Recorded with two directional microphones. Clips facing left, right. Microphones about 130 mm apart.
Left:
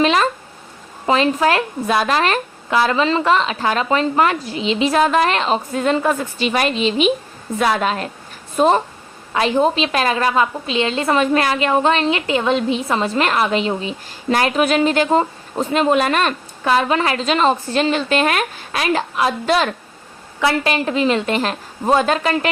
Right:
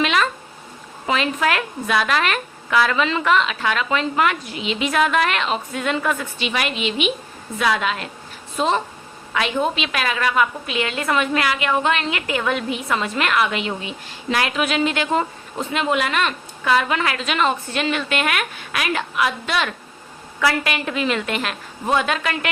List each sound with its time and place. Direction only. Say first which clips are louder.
0.0 s a woman's voice: left 4 dB; 35° left (ahead or behind)
9.3 s a woman's voice: left 5 dB; 35° left (ahead or behind)